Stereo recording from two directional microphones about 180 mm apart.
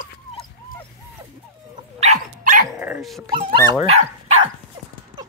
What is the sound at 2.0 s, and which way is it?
Dog, 45° right (ahead or behind).